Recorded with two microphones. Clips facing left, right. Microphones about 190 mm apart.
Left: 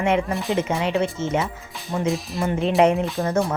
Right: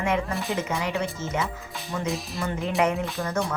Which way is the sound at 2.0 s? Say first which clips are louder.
Left 7 dB; centre (ahead or behind).